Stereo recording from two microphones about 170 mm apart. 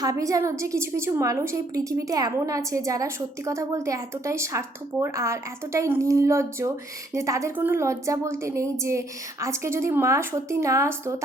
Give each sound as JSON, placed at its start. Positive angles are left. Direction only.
{"t": 0.0, "sound": "a woman's voice", "side_deg": -20}